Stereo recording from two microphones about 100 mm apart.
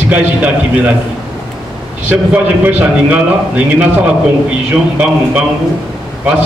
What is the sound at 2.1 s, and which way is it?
A man's voice, 15° right (ahead or behind).